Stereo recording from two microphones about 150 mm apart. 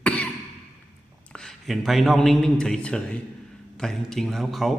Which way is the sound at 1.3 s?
5° left (ahead or behind).